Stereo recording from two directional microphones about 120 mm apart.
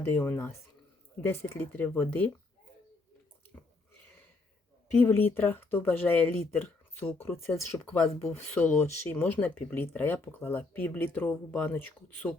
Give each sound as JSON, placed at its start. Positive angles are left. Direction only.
{"t": 0.0, "sound": "speech", "side_deg": 20}
{"t": 4.9, "sound": "speech", "side_deg": 15}